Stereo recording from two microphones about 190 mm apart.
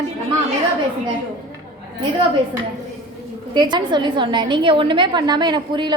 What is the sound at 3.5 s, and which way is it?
A woman's voice, 25° right (ahead or behind).